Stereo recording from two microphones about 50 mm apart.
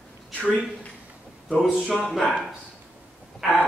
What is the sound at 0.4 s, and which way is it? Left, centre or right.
Speech, left.